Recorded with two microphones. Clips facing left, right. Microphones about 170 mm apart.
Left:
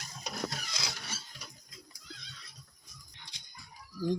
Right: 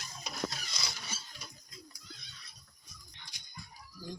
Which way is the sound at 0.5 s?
90° left.